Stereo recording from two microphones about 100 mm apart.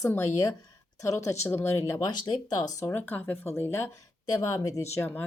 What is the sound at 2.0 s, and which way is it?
Speech, 45° left (ahead or behind).